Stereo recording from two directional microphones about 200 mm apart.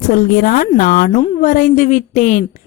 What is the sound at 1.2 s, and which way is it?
Speech, 35° left (ahead or behind).